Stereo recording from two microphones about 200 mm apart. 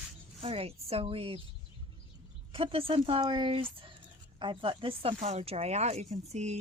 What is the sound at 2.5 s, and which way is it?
Speech, 25° right (ahead or behind).